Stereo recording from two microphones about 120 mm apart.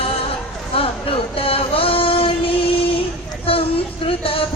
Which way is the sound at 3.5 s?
50° left (ahead or behind).